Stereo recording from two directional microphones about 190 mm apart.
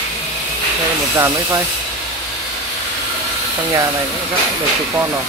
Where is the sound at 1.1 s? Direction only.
15° right (ahead or behind).